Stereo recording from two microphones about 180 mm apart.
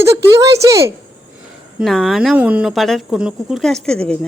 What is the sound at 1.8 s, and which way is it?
Speech, centre (ahead or behind).